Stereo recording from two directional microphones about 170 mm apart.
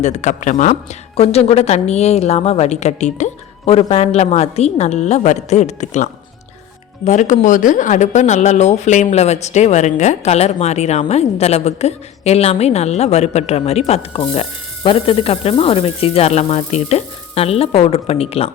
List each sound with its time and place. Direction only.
0.0 s speech: 45° left (ahead or behind)